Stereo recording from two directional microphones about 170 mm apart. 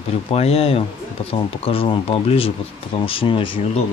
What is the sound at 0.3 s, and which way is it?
Speech, 35° left (ahead or behind).